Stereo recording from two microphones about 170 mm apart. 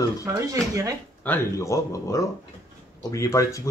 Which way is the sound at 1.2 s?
15° left (ahead or behind).